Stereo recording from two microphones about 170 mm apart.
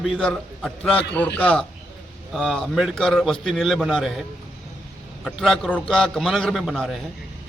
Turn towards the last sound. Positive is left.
turn(degrees=0)  # may be behind; listen again after turning